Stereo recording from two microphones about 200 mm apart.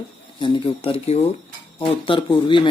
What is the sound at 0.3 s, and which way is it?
Speech, 25° left (ahead or behind).